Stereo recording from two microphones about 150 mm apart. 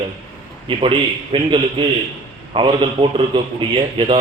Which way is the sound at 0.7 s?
35° right (ahead or behind).